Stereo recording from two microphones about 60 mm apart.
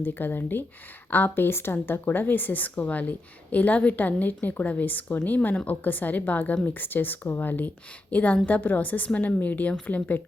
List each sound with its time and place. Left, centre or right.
0.0 s a woman's voice: left